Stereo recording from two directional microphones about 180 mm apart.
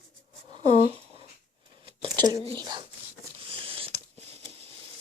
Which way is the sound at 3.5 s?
30° right (ahead or behind).